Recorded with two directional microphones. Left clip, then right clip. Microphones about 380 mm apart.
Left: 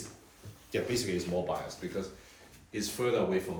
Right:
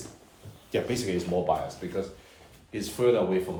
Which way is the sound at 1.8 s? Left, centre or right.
Right.